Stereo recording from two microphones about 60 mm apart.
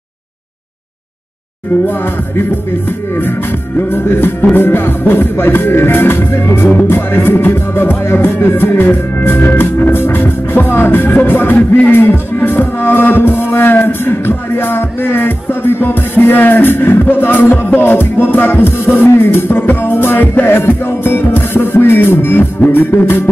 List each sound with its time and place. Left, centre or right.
3.9 s music: left